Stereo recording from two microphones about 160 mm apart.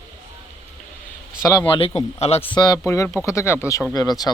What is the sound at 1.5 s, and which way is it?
Speech, 30° left (ahead or behind).